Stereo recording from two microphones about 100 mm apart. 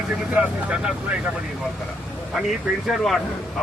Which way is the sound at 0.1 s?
15° right (ahead or behind).